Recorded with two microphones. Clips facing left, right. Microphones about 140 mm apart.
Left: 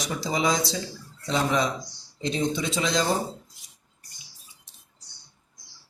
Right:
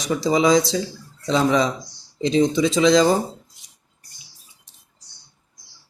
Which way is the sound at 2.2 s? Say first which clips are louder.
Right 9 dB; 90° right.